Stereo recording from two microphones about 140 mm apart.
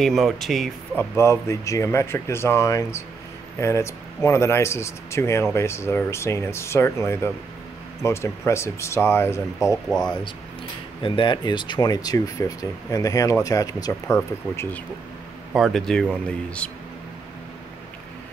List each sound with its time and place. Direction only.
0.0 s speech: centre (ahead or behind)
0.9 s speech: 20° left (ahead or behind)
9.8 s speech: 5° left (ahead or behind)
11.0 s speech: 35° left (ahead or behind); by 14.8 s 20° left (ahead or behind)
15.5 s speech: centre (ahead or behind)